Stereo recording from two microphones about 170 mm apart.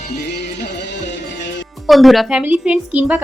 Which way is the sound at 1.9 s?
Centre (ahead or behind).